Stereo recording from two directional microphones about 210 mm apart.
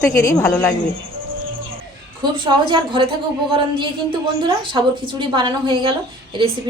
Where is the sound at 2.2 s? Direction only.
20° right (ahead or behind).